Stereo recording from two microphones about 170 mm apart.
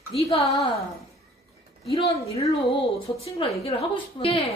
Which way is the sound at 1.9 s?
35° left (ahead or behind).